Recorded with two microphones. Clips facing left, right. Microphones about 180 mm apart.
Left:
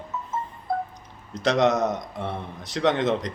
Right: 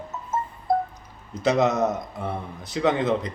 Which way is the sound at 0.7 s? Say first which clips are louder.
Right 5 dB; 40° right (ahead or behind).